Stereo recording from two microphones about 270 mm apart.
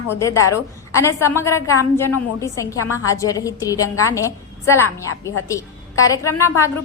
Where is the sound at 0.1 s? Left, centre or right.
Centre.